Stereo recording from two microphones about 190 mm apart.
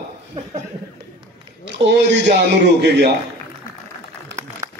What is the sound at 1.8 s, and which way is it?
A man's voice, 65° right (ahead or behind).